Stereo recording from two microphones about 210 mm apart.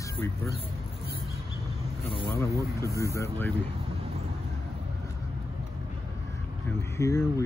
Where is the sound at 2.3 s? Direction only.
15° left (ahead or behind).